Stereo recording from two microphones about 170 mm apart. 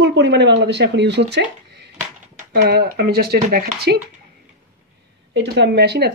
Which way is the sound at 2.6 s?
75° right (ahead or behind).